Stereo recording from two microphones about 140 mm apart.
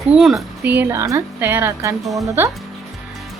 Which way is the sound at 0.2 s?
Centre (ahead or behind).